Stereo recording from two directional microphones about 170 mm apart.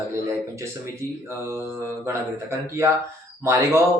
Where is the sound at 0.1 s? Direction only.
15° right (ahead or behind).